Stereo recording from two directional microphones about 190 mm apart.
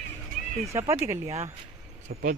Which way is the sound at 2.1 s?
50° right (ahead or behind).